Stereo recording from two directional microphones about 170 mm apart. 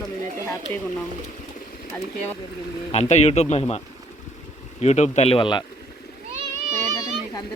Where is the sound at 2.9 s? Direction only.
40° left (ahead or behind).